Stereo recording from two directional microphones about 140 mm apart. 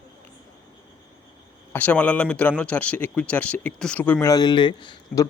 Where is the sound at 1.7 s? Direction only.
10° left (ahead or behind).